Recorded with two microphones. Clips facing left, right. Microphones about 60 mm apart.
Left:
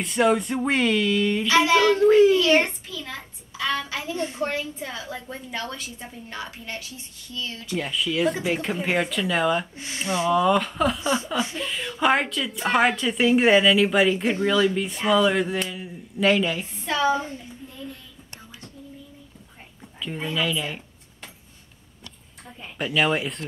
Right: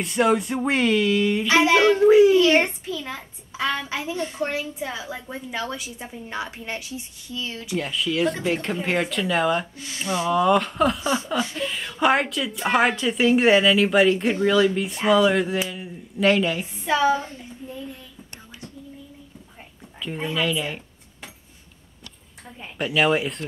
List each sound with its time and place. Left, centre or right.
0.0 s speech: centre
1.5 s a sound: right
2.0 s a woman's voice: centre
4.5 s a woman's voice: centre
7.7 s speech: centre
9.8 s speech: left
10.3 s speech: centre
11.0 s a woman's voice: centre
11.5 s speech: centre
20.0 s speech: centre
22.8 s speech: centre